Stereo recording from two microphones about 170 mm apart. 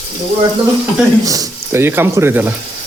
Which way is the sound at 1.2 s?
15° right (ahead or behind).